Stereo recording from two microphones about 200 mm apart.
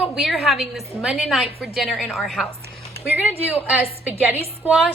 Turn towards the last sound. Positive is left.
turn(degrees=-5)  # may be behind; listen again after turning